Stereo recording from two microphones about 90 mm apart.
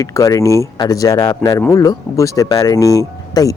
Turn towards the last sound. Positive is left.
turn(degrees=40)  # may be behind; listen again after turning